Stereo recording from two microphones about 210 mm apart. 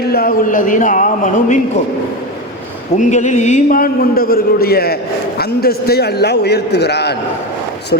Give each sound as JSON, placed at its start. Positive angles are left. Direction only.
{"t": 0.1, "sound": "speech", "side_deg": 45}
{"t": 3.0, "sound": "a man's voice", "side_deg": 35}